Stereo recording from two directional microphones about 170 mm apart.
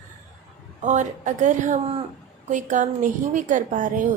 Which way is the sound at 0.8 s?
45° right (ahead or behind).